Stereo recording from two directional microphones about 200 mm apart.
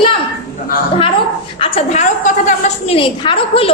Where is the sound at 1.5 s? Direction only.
25° left (ahead or behind).